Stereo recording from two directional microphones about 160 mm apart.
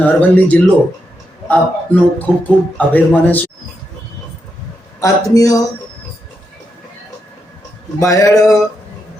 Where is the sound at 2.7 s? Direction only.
10° left (ahead or behind).